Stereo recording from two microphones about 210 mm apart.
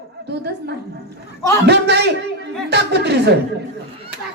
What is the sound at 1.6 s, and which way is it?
A man's voice, 55° right (ahead or behind).